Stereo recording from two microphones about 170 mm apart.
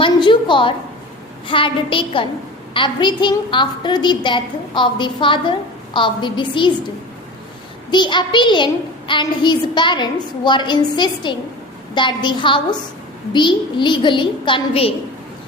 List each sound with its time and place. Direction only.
0.0 s a sound: 30° left (ahead or behind)
1.5 s a woman's voice: 30° left (ahead or behind)
7.9 s a woman's voice: 25° left (ahead or behind)